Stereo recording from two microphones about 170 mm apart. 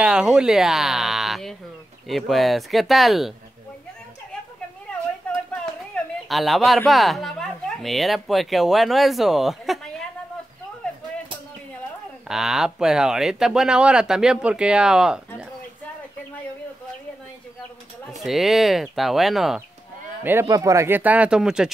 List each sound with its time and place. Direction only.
0.0 s speech: 5° right (ahead or behind)
6.2 s speech: centre (ahead or behind)
12.3 s speech: 5° right (ahead or behind)
18.1 s speech: centre (ahead or behind)
20.2 s speech: 15° right (ahead or behind)